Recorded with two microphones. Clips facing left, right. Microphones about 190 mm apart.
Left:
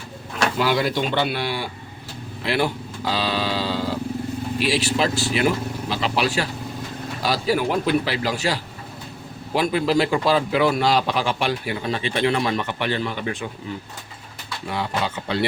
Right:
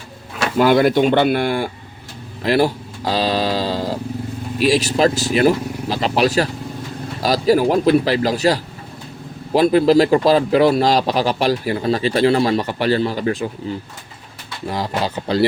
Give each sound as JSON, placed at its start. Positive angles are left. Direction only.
{"t": 0.6, "sound": "speech", "side_deg": -55}
{"t": 2.4, "sound": "speech", "side_deg": -40}